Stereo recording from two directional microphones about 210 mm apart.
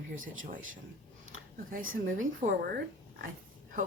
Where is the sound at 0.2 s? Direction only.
40° right (ahead or behind).